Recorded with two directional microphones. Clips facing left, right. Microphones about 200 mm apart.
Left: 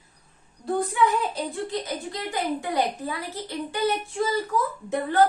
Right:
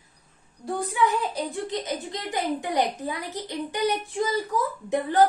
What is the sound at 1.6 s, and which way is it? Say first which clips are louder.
A woman's voice: even; 20° right (ahead or behind).